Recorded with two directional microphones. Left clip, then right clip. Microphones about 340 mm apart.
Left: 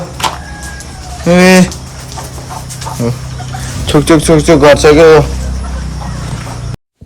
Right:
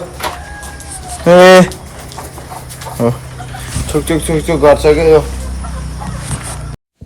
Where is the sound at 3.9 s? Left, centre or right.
Centre.